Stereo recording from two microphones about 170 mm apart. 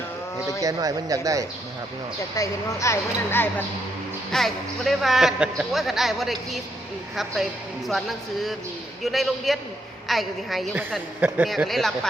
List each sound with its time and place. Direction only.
0.6 s speech: 20° right (ahead or behind)
2.3 s a woman's voice: 20° left (ahead or behind)
4.3 s a man's voice: centre (ahead or behind)
7.9 s a man's voice: centre (ahead or behind)